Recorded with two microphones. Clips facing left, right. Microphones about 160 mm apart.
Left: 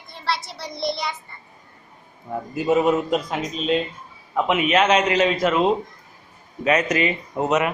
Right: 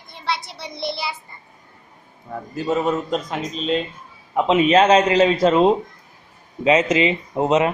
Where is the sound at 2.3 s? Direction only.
15° left (ahead or behind).